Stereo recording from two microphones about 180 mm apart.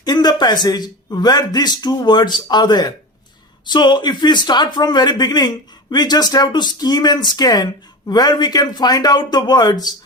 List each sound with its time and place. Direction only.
0.0 s speech: 20° left (ahead or behind)